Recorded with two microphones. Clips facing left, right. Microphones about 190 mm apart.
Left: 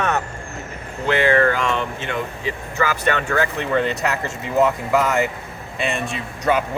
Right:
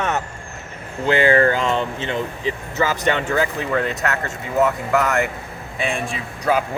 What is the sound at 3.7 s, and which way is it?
A man's voice, centre (ahead or behind).